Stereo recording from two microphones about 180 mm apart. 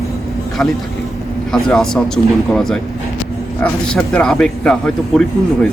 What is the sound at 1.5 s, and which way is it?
A man's voice, 5° left (ahead or behind).